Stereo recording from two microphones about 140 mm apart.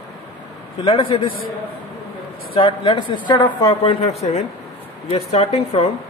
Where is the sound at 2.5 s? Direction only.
40° left (ahead or behind).